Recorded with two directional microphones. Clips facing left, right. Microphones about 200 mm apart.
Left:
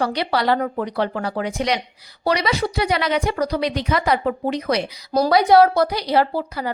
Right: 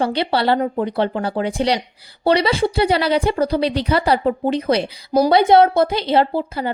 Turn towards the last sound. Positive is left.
turn(degrees=-25)  # may be behind; listen again after turning